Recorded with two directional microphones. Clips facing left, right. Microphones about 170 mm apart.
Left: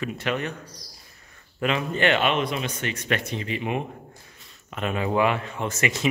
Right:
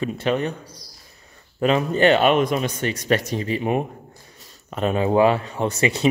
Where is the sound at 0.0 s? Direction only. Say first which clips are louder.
Right 5 dB; 30° right (ahead or behind).